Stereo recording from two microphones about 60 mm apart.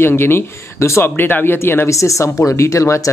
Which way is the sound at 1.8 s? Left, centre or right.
Left.